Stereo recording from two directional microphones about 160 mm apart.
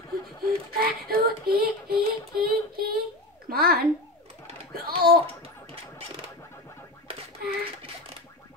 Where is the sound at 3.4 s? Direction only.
70° right (ahead or behind).